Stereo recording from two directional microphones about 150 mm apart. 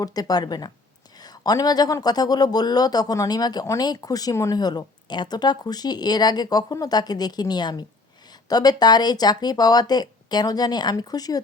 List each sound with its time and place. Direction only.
0.0 s speech: 25° left (ahead or behind)